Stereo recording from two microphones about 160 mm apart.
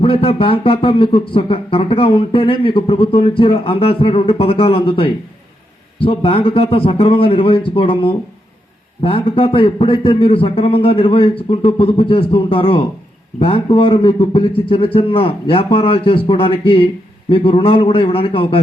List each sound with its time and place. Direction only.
0.0 s a man's voice: 35° left (ahead or behind)